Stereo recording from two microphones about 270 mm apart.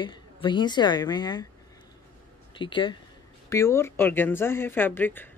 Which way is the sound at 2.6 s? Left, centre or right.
Centre.